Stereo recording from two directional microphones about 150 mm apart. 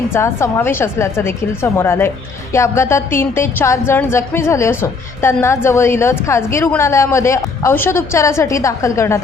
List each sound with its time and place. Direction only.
0.1 s a woman's voice: 15° left (ahead or behind)